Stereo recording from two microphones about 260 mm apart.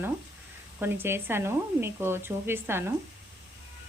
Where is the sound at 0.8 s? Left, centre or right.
Centre.